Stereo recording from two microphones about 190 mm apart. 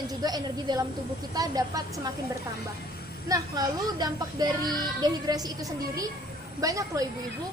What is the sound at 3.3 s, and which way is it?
A woman's voice, 20° right (ahead or behind).